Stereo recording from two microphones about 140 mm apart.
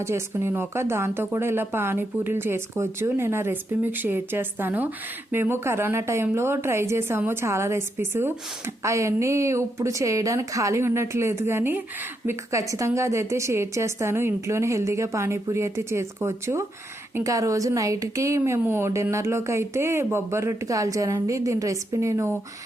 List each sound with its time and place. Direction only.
0.0 s a woman's voice: 20° right (ahead or behind)